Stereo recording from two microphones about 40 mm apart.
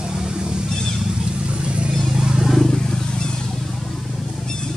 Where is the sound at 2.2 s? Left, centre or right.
Centre.